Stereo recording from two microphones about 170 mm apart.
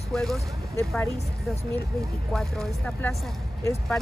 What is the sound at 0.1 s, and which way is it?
Speech, centre (ahead or behind).